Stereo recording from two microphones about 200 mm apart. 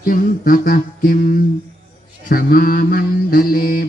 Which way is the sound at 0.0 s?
45° left (ahead or behind).